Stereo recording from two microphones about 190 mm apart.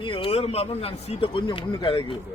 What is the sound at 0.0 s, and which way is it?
Speech, 25° left (ahead or behind).